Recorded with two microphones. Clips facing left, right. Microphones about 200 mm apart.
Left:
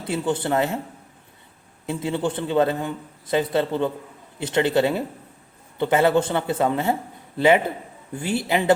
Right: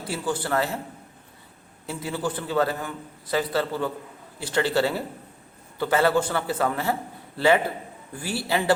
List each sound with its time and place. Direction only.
0.1 s a man's voice: 20° left (ahead or behind)
1.9 s a man's voice: 25° left (ahead or behind)